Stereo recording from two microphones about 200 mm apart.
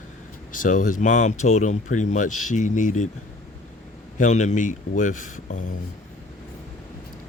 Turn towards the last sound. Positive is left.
turn(degrees=40)  # may be behind; listen again after turning